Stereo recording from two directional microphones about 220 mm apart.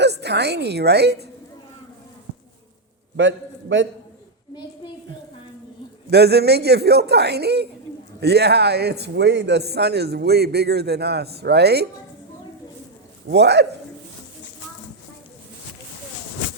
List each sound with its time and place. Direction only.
0.0 s a woman's voice: 50° right (ahead or behind)
3.2 s a man's voice: 55° right (ahead or behind)
6.1 s a man's voice: 50° right (ahead or behind)
13.2 s a man's voice: 50° right (ahead or behind)